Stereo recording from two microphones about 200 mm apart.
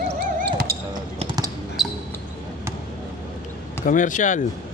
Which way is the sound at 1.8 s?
Centre (ahead or behind).